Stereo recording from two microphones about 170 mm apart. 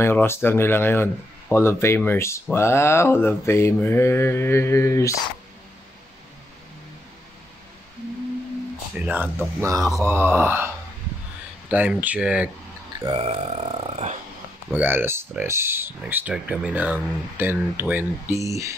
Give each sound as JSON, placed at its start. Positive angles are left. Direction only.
{"t": 0.0, "sound": "mantra", "side_deg": 15}
{"t": 9.0, "sound": "speech", "side_deg": -10}
{"t": 11.7, "sound": "speech", "side_deg": -10}
{"t": 13.0, "sound": "speech", "side_deg": -35}
{"t": 14.7, "sound": "speech", "side_deg": -10}